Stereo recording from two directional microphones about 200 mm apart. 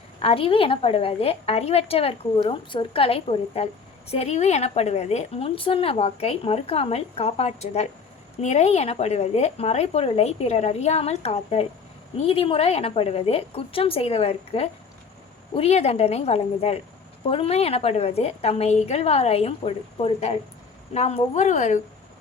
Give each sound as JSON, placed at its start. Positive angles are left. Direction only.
{"t": 0.2, "sound": "a woman's voice", "side_deg": 30}